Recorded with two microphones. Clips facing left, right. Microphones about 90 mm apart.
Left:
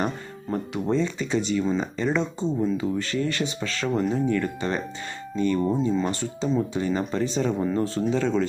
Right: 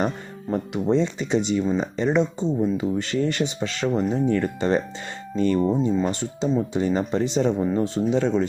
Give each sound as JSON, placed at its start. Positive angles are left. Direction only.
{"t": 0.7, "sound": "speech", "side_deg": -20}
{"t": 5.9, "sound": "speech", "side_deg": -15}